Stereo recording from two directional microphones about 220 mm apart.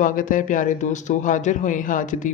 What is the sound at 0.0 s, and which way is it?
A man's voice, 35° left (ahead or behind).